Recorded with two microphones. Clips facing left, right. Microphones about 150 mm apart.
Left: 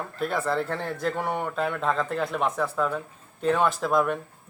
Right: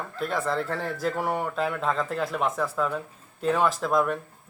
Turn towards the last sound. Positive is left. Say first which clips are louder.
# left 1 dB
turn(degrees=0)  # may be behind; listen again after turning